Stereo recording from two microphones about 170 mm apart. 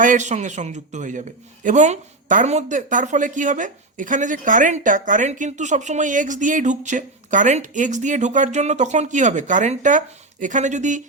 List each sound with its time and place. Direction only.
0.0 s speech: 45° right (ahead or behind)